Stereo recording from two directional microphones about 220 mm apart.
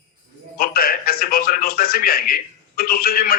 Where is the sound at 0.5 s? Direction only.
40° left (ahead or behind).